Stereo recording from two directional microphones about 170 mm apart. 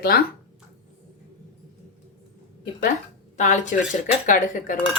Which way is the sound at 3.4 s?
45° left (ahead or behind).